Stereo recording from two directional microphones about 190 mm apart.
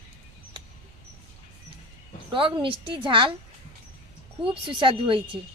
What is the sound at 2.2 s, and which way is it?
A woman's voice, 25° right (ahead or behind).